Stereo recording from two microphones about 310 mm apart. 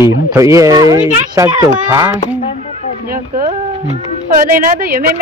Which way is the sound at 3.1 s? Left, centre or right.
Right.